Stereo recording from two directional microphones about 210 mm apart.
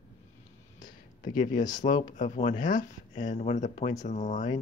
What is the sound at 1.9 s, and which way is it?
Speech, 40° left (ahead or behind).